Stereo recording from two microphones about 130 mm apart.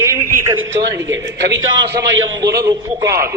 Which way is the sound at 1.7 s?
35° right (ahead or behind).